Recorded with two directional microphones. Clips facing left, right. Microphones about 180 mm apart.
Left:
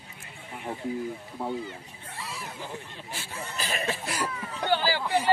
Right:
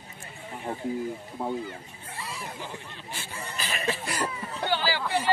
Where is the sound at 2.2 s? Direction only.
Centre (ahead or behind).